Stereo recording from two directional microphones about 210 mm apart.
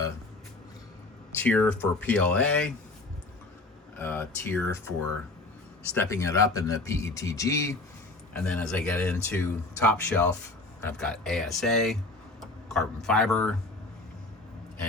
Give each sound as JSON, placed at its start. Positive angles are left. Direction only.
{"t": 1.3, "sound": "speech", "side_deg": 10}
{"t": 3.9, "sound": "speech", "side_deg": 10}
{"t": 6.0, "sound": "speech", "side_deg": 15}